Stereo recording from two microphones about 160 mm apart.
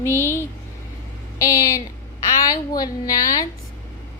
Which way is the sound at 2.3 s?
25° left (ahead or behind).